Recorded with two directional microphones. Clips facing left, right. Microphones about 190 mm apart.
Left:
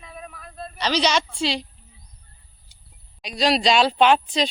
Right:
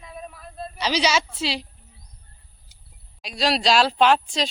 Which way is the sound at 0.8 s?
10° right (ahead or behind).